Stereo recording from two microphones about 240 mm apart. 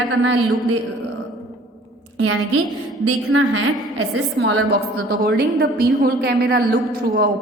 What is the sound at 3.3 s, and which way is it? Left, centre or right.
Speech, right.